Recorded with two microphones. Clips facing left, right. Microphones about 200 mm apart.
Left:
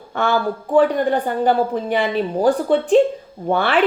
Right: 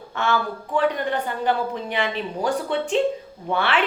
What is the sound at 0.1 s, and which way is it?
A woman's voice, 40° left (ahead or behind).